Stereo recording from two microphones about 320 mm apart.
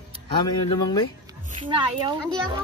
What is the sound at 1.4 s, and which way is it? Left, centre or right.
Speech, centre.